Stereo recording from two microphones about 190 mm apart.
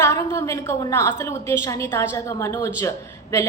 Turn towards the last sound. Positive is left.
turn(degrees=15)  # may be behind; listen again after turning